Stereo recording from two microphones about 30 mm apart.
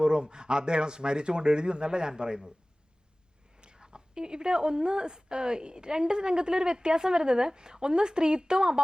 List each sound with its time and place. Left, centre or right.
0.0 s a woman's voice: right
3.6 s a woman's voice: right